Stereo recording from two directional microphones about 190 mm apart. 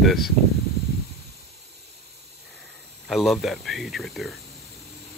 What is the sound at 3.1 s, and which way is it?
Speech, centre (ahead or behind).